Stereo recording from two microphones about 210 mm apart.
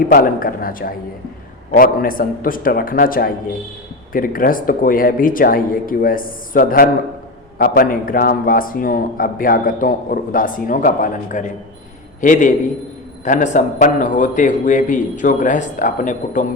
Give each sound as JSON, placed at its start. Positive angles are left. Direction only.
{"t": 0.1, "sound": "a man's voice", "side_deg": 45}